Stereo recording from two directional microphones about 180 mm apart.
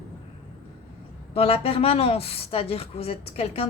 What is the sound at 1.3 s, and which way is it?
Speech, 35° left (ahead or behind).